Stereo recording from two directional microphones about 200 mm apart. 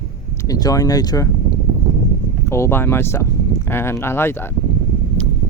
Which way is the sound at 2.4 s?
15° left (ahead or behind).